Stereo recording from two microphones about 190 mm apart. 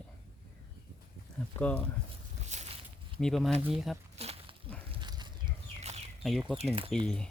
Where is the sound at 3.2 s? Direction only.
Centre (ahead or behind).